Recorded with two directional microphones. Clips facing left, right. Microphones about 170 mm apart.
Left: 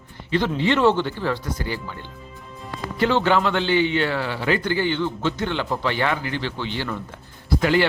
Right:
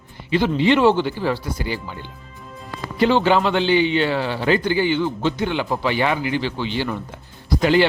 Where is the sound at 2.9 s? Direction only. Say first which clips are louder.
Right 3 dB; 15° right (ahead or behind).